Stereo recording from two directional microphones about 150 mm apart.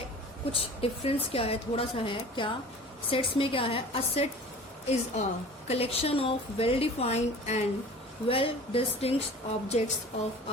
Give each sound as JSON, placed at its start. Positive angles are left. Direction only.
{"t": 0.5, "sound": "a woman's voice", "side_deg": 40}